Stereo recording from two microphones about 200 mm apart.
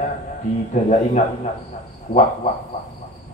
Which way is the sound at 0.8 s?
40° left (ahead or behind).